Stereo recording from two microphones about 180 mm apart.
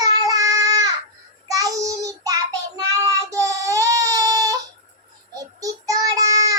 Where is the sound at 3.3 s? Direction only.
15° right (ahead or behind).